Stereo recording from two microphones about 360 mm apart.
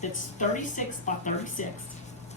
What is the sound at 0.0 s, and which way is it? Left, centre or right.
Speech, centre.